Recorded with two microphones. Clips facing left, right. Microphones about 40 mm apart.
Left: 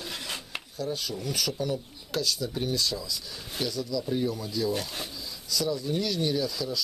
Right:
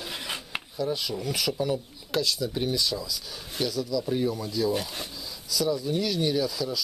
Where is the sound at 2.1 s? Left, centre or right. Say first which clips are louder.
Right 2 dB; centre.